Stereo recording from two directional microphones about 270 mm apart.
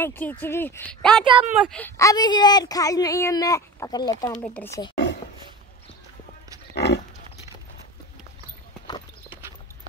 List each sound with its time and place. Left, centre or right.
0.0 s speech: centre
1.8 s speech: centre
6.7 s pig: left